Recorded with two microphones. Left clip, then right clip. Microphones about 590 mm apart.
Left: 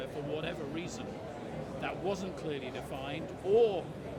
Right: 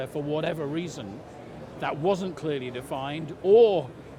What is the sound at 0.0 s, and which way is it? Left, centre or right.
A man's voice, right.